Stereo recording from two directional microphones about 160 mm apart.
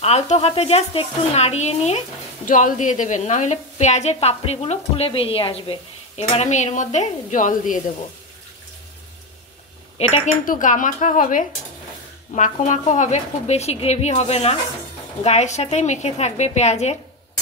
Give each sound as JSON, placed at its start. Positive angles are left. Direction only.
{"t": 0.0, "sound": "speech", "side_deg": 40}
{"t": 9.9, "sound": "speech", "side_deg": 40}
{"t": 10.4, "sound": "speech", "side_deg": 55}